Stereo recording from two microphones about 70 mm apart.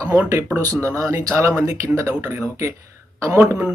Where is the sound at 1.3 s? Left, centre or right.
Right.